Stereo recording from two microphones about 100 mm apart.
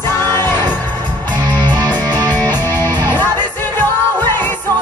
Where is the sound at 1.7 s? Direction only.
40° right (ahead or behind).